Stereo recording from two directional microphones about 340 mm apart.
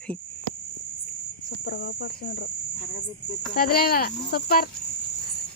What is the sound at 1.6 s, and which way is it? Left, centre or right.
Speech, left.